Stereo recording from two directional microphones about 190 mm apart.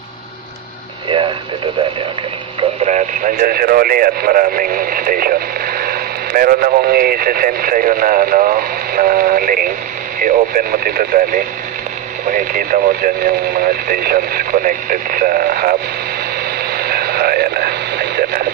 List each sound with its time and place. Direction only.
2.8 s speech: 45° right (ahead or behind)
16.7 s radio: 55° right (ahead or behind)